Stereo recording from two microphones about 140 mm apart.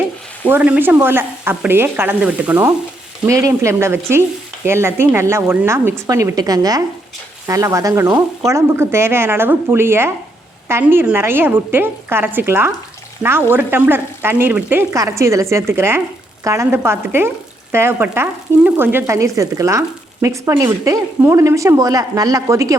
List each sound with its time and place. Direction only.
0.4 s speech: 10° right (ahead or behind)